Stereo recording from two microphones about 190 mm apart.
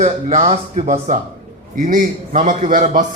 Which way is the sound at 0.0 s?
35° right (ahead or behind).